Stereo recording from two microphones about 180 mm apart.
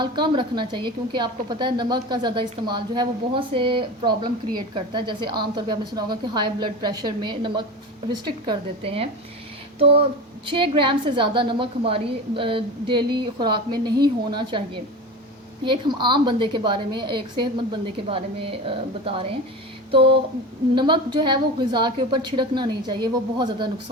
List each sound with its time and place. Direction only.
0.0 s a woman's voice: 25° right (ahead or behind)
15.6 s a woman's voice: 25° right (ahead or behind)
19.9 s a sound: 30° right (ahead or behind)
20.7 s a woman's voice: 25° right (ahead or behind)